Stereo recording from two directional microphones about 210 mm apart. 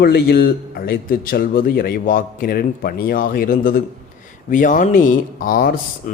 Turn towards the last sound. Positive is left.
turn(degrees=40)  # may be behind; listen again after turning